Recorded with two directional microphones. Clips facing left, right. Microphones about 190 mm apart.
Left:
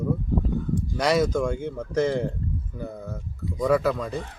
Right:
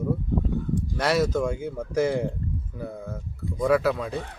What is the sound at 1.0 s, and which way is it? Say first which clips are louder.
Speech: left 1 dB; 5° right (ahead or behind).